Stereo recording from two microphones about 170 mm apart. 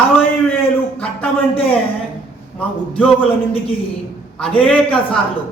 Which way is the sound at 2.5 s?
10° left (ahead or behind).